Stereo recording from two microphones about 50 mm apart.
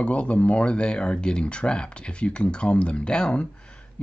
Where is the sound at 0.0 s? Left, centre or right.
Left.